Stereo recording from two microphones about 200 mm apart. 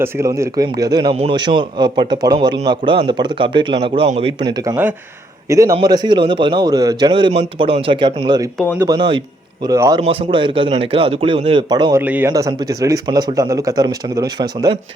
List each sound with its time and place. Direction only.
0.0 s a man's voice: 15° right (ahead or behind)
4.5 s a man's voice: 15° right (ahead or behind)
8.5 s speech: 10° left (ahead or behind)
8.8 s a man's voice: 20° right (ahead or behind)
10.0 s a man's voice: 30° right (ahead or behind)